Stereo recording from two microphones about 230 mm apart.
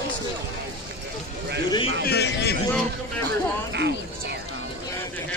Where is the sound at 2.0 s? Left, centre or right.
Left.